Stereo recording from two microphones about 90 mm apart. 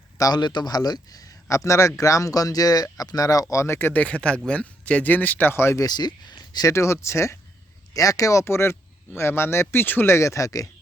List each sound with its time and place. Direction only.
0.2 s a man's voice: 50° left (ahead or behind); by 4.0 s 25° left (ahead or behind)
4.0 s speech: 10° left (ahead or behind); by 5.8 s 30° left (ahead or behind)
5.8 s speech: 50° left (ahead or behind)
6.7 s speech: 30° left (ahead or behind)